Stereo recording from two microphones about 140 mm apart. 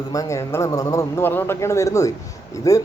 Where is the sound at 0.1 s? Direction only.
25° left (ahead or behind).